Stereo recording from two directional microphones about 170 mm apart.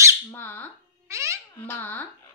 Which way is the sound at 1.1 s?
15° right (ahead or behind).